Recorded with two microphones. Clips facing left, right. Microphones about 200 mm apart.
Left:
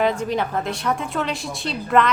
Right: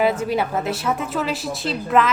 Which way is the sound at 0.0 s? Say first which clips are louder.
Right 1 dB; 5° right (ahead or behind).